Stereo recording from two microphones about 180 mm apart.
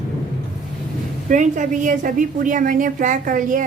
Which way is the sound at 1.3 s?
45° right (ahead or behind).